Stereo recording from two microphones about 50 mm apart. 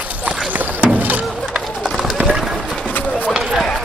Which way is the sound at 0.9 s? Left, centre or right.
Right.